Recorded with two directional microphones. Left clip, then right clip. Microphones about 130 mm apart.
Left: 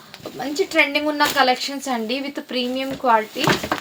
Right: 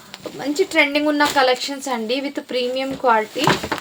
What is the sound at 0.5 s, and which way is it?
Speech, 45° right (ahead or behind).